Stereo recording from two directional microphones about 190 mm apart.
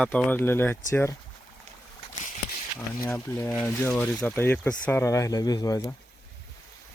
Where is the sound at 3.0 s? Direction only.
15° left (ahead or behind).